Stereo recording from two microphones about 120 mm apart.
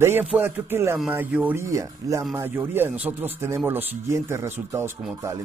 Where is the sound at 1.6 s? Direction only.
25° right (ahead or behind).